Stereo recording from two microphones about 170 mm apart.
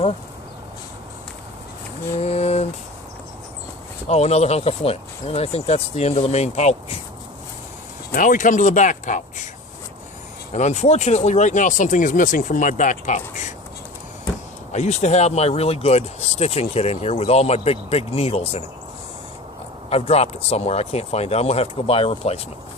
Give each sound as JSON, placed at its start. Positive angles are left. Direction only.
{"t": 2.1, "sound": "speech", "side_deg": 40}
{"t": 4.1, "sound": "speech", "side_deg": 40}
{"t": 8.1, "sound": "speech", "side_deg": 50}
{"t": 10.5, "sound": "speech", "side_deg": 40}
{"t": 14.7, "sound": "speech", "side_deg": 40}
{"t": 19.9, "sound": "speech", "side_deg": 35}